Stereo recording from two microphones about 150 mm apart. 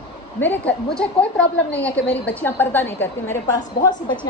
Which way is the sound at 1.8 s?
10° left (ahead or behind).